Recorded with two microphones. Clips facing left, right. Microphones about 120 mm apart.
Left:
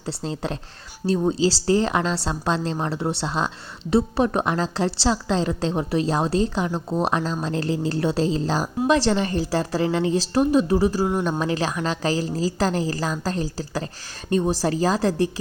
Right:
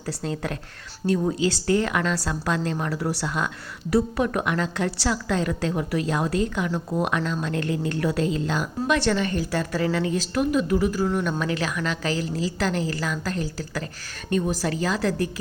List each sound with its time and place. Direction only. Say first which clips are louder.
0.0 s speech: left 1 dB; 25° left (ahead or behind)
7.0 s a woman's voice: left 3 dB; 30° left (ahead or behind)